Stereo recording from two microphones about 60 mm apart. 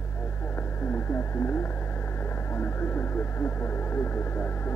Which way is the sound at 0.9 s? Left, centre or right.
Left.